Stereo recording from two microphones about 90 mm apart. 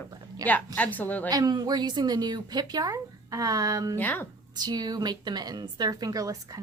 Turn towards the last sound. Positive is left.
turn(degrees=-40)  # may be behind; listen again after turning